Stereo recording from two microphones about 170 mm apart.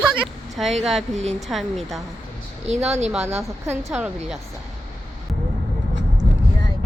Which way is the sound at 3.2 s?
15° right (ahead or behind).